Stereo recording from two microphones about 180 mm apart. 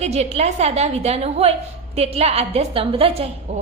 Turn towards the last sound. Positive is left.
turn(degrees=-35)  # may be behind; listen again after turning